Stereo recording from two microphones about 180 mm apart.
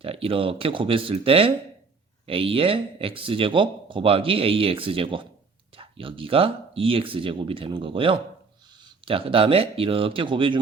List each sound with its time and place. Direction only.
0.0 s speech: 30° right (ahead or behind)